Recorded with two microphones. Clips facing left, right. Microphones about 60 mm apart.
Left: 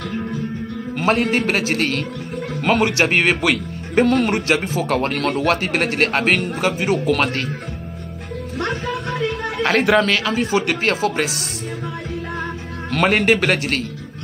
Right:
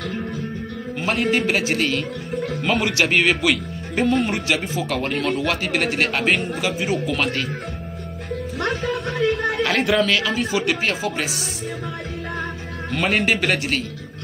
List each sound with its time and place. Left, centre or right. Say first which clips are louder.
0.9 s a man's voice: left 3 dB; left
4.6 s a man's voice: left 4 dB; left
9.6 s a man's voice: left 7 dB; left
12.9 s a man's voice: left 4 dB; left